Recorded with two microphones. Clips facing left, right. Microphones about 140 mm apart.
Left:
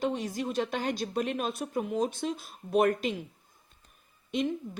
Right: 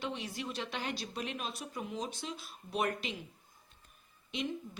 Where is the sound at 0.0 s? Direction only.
45° left (ahead or behind).